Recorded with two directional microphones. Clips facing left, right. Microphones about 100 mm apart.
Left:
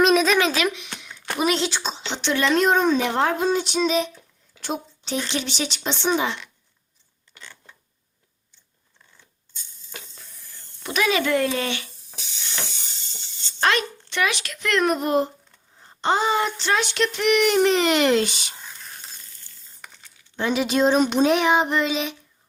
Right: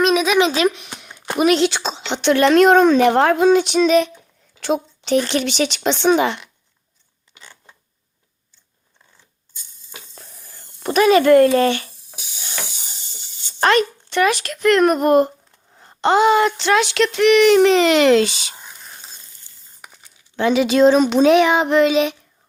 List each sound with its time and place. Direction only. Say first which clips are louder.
0.0 s a sound: right 1 dB; centre (ahead or behind)
0.3 s speech: right 5 dB; 20° right (ahead or behind)
0.6 s speech: right 6 dB; 40° right (ahead or behind)
0.9 s a sound: right 1 dB; 50° right (ahead or behind)
1.4 s speech: right 7 dB; 65° right (ahead or behind)
4.6 s speech: right 9 dB; 80° right
7.3 s a sound: even; 10° right (ahead or behind)
10.5 s speech: right 9 dB; 45° right (ahead or behind)
13.1 s a sound: even; 10° right (ahead or behind)
13.6 s a child's voice: right 6 dB; 45° right (ahead or behind)
15.7 s speech: right 6 dB; 70° right (ahead or behind); by 18.5 s 90° right
18.5 s whispering: right 1 dB; 20° right (ahead or behind)
19.8 s crumpling: right 2 dB; 10° right (ahead or behind)
20.3 s speech: right 6 dB; 90° right; by 22.1 s 65° right (ahead or behind)